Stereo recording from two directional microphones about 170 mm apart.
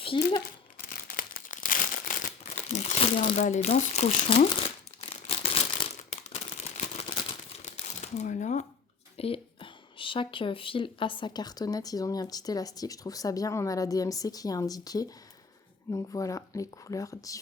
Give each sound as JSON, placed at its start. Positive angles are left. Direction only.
{"t": 0.0, "sound": "a child's voice", "side_deg": 30}
{"t": 0.9, "sound": "crumpling", "side_deg": 55}
{"t": 7.6, "sound": "crumpling", "side_deg": 40}
{"t": 9.1, "sound": "speech", "side_deg": 35}